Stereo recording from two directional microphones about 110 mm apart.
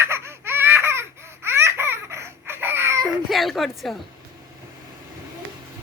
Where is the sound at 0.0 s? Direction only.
25° right (ahead or behind).